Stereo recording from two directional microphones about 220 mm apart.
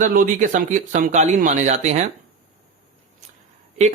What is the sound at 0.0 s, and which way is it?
Speech, 40° right (ahead or behind).